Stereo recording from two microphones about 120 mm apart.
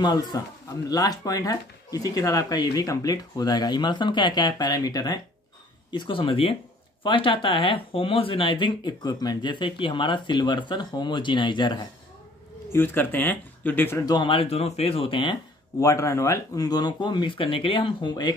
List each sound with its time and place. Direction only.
0.0 s speech: 35° left (ahead or behind)
12.7 s speech: 15° left (ahead or behind)
14.0 s speech: 40° left (ahead or behind)
15.8 s speech: 25° left (ahead or behind)